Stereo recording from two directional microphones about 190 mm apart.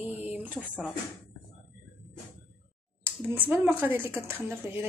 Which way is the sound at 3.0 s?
10° right (ahead or behind).